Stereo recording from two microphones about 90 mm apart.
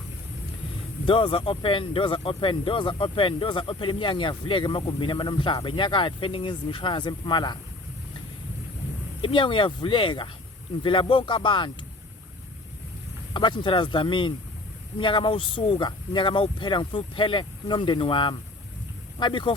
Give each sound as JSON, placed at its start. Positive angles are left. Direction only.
{"t": 1.0, "sound": "speech", "side_deg": 75}
{"t": 9.2, "sound": "speech", "side_deg": 75}
{"t": 13.3, "sound": "speech", "side_deg": 60}